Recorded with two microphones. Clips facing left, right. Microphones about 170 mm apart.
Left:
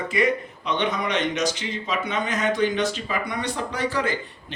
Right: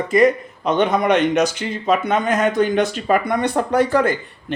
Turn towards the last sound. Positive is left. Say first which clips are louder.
# right 9 dB
turn(degrees=-50)  # may be behind; listen again after turning